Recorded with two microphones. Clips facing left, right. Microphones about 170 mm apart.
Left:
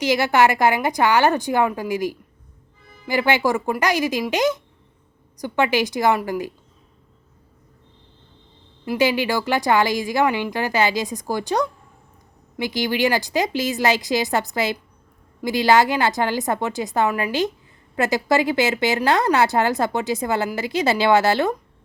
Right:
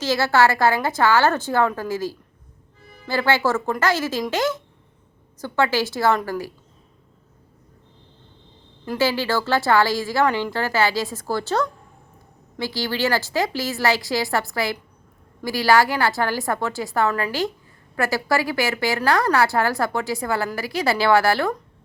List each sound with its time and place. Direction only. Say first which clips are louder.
0.0 s a woman's voice: left 1 dB; 15° left (ahead or behind)
8.8 s a woman's voice: left 2 dB; 15° left (ahead or behind)